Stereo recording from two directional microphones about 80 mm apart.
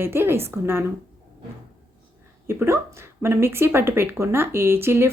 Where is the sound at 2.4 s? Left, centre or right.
Right.